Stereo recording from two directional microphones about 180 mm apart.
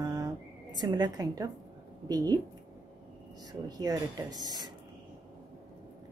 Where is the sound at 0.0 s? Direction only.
20° right (ahead or behind).